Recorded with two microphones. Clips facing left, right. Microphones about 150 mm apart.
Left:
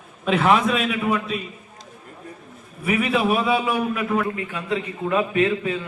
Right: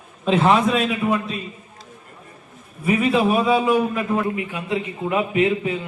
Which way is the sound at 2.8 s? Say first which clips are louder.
Right 2 dB; 20° right (ahead or behind).